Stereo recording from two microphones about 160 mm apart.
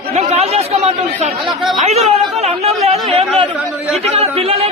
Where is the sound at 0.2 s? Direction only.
45° right (ahead or behind).